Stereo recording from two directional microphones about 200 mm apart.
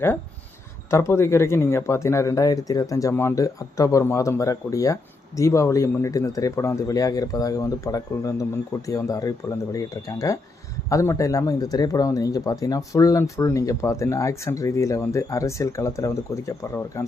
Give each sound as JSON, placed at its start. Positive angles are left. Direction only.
{"t": 0.9, "sound": "speech", "side_deg": 15}